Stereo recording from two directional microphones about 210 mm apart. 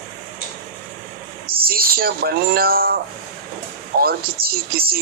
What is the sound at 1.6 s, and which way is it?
Speech, 45° right (ahead or behind).